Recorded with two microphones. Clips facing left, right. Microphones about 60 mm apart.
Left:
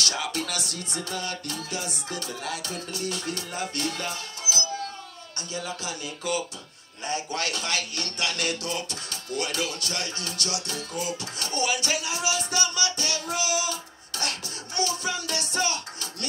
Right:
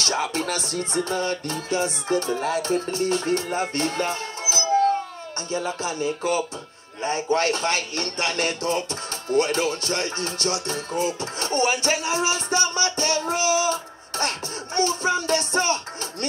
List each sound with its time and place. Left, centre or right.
0.0 s a man's voice: right
3.5 s music: right
5.5 s a man's voice: right